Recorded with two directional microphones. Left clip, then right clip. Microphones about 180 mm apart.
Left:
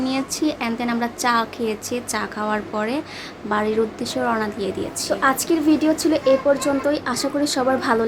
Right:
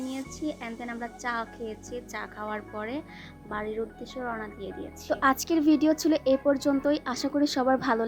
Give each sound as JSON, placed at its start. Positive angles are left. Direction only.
{"t": 0.1, "sound": "a woman's voice", "side_deg": -20}
{"t": 5.0, "sound": "a woman's voice", "side_deg": -55}